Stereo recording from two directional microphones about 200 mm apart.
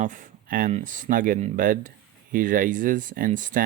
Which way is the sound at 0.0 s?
40° right (ahead or behind).